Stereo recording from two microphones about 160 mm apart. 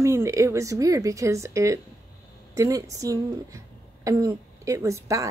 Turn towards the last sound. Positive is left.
turn(degrees=-20)  # may be behind; listen again after turning